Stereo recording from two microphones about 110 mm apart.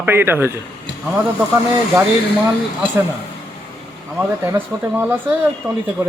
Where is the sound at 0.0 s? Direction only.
20° right (ahead or behind).